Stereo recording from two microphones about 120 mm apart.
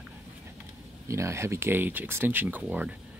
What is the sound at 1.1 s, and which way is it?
Speech, 25° right (ahead or behind).